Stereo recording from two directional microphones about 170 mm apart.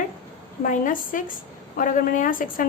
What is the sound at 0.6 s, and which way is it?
A woman's voice, 50° left (ahead or behind).